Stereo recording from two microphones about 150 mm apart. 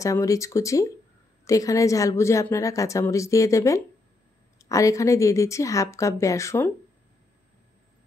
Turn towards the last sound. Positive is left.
turn(degrees=15)  # may be behind; listen again after turning